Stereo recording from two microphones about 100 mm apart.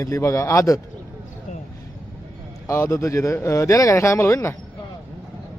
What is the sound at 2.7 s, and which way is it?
A man's voice, 30° left (ahead or behind).